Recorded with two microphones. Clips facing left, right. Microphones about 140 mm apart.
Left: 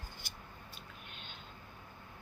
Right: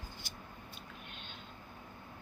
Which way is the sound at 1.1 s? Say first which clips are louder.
Right 1 dB; centre (ahead or behind).